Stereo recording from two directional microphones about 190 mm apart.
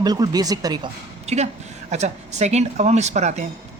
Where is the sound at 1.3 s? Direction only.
35° right (ahead or behind).